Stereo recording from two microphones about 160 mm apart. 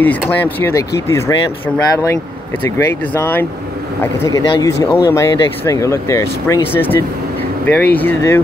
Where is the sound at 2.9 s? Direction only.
15° left (ahead or behind).